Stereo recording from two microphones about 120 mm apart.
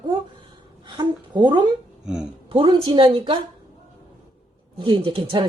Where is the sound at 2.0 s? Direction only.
5° right (ahead or behind).